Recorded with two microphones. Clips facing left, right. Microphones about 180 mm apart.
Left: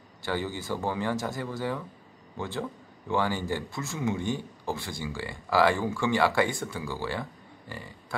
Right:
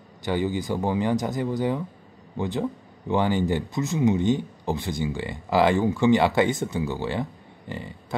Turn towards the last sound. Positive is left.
turn(degrees=-20)  # may be behind; listen again after turning